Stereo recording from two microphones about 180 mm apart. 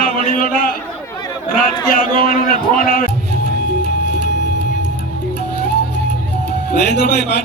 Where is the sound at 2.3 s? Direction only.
50° left (ahead or behind).